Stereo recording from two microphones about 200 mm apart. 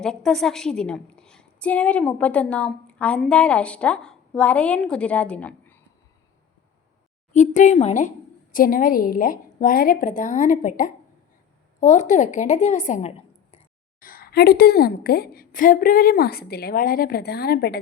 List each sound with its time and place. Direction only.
0.0 s a woman's voice: centre (ahead or behind)
7.3 s a woman's voice: 35° left (ahead or behind)
14.0 s a woman's voice: 45° left (ahead or behind)